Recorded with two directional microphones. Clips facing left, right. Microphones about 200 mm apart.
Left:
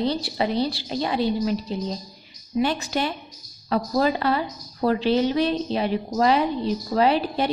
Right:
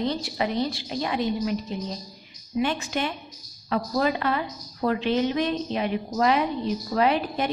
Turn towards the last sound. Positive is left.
turn(degrees=30)  # may be behind; listen again after turning